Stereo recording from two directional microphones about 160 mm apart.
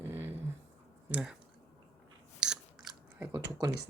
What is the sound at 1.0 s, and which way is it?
Speech, 10° right (ahead or behind).